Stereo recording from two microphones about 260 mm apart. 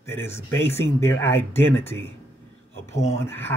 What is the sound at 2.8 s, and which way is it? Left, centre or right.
Speech, left.